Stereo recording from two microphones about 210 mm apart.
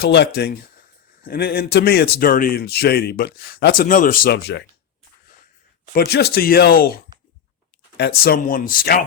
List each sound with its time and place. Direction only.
0.0 s speech: 55° left (ahead or behind)
5.9 s speech: 50° left (ahead or behind)